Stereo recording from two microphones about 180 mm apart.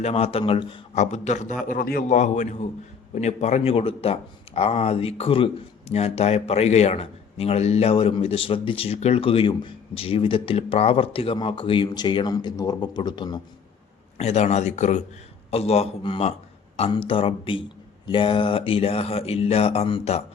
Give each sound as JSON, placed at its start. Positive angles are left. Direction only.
{"t": 0.0, "sound": "a man's voice", "side_deg": 35}
{"t": 14.2, "sound": "a man's voice", "side_deg": 35}